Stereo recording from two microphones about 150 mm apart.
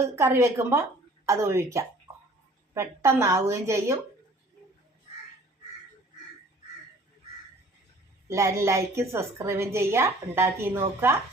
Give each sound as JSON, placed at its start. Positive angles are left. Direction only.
{"t": 0.0, "sound": "a woman's voice", "side_deg": -15}
{"t": 3.0, "sound": "a woman's voice", "side_deg": -20}
{"t": 8.3, "sound": "a woman's voice", "side_deg": -20}